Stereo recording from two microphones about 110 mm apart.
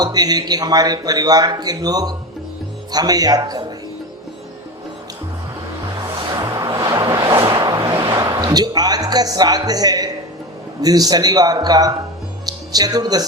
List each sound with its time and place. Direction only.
0.0 s a man's voice: 35° right (ahead or behind)
6.4 s vehicle: 35° right (ahead or behind)
8.0 s a man's voice: 40° right (ahead or behind)